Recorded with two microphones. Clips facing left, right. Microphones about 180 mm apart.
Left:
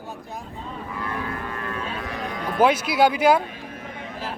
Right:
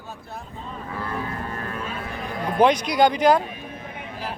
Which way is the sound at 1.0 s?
30° right (ahead or behind).